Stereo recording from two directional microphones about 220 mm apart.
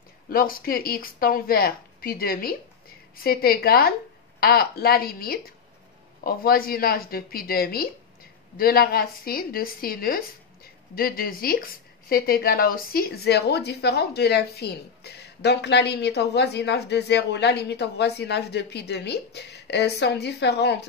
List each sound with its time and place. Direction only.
0.3 s speech: 40° left (ahead or behind)